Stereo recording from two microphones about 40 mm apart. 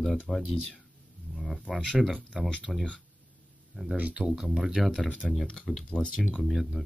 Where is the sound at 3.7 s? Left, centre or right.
Right.